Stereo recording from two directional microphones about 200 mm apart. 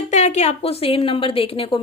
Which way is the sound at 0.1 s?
35° left (ahead or behind).